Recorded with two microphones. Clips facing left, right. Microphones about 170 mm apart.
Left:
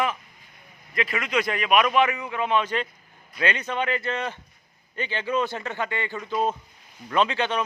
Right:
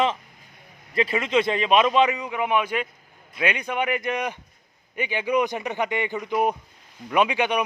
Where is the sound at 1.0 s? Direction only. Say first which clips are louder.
Right 4 dB; 30° right (ahead or behind).